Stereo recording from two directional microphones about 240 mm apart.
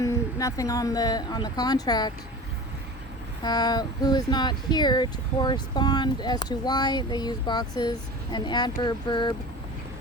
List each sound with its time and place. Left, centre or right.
0.0 s speech: centre
3.4 s speech: centre